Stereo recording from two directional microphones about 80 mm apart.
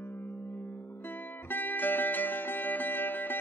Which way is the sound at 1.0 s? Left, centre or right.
Left.